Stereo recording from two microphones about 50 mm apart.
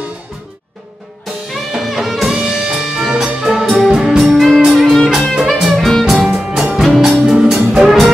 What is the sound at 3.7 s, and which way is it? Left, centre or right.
Music, centre.